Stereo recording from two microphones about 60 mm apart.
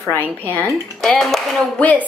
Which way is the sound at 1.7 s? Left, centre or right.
Left.